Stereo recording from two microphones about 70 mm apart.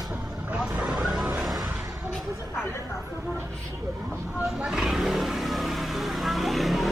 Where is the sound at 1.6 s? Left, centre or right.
Centre.